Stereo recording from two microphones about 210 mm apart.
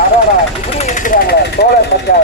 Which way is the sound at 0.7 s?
35° left (ahead or behind).